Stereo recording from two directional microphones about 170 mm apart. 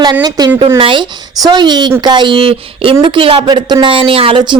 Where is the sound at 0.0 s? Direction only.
25° right (ahead or behind).